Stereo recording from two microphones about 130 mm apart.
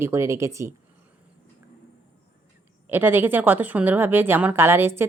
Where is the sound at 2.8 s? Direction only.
15° right (ahead or behind).